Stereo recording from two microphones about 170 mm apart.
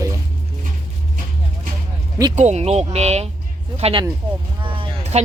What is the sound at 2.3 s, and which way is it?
Speech, 40° right (ahead or behind).